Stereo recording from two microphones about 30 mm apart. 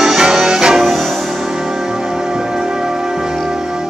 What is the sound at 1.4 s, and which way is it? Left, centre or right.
Music, centre.